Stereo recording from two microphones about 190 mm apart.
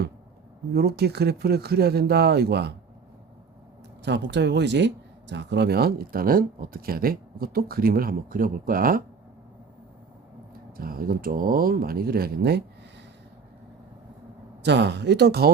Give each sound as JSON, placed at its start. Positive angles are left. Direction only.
{"t": 0.7, "sound": "speech", "side_deg": -55}
{"t": 4.0, "sound": "speech", "side_deg": -65}
{"t": 10.8, "sound": "speech", "side_deg": -50}
{"t": 14.6, "sound": "speech", "side_deg": -65}